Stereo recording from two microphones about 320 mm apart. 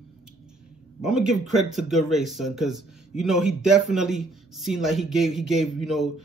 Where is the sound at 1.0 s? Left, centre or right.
Centre.